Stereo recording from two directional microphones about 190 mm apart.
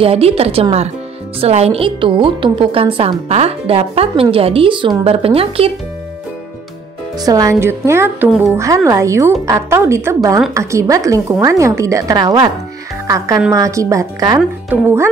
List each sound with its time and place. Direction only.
0.0 s a woman's voice: 30° right (ahead or behind)
7.2 s a woman's voice: 20° right (ahead or behind)